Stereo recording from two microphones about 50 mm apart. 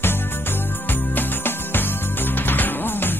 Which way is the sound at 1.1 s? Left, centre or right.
Left.